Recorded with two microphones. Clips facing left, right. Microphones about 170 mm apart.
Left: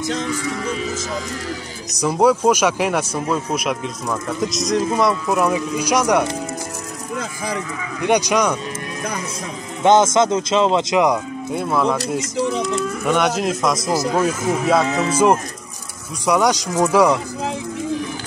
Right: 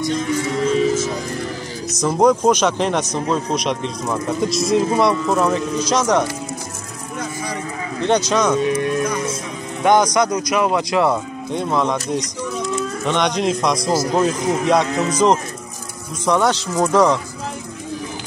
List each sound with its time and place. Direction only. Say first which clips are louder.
2.0 s speech: right 1 dB; 10° left (ahead or behind)
8.1 s speech: even; 10° left (ahead or behind)
9.8 s speech: left 1 dB; 25° left (ahead or behind)
11.5 s a man's voice: even; 5° left (ahead or behind)